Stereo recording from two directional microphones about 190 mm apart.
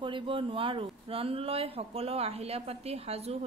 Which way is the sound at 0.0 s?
25° right (ahead or behind).